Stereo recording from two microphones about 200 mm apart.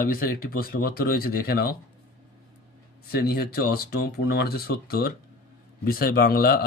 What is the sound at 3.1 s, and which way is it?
Speech, 50° left (ahead or behind).